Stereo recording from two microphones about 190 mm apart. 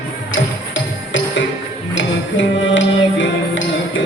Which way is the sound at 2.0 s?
75° left (ahead or behind).